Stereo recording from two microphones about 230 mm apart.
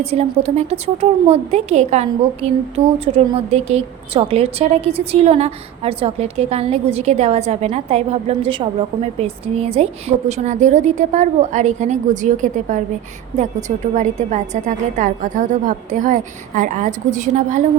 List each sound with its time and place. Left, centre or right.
0.0 s a woman's voice: right